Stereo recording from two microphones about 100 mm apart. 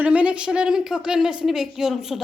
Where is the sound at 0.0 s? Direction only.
15° right (ahead or behind).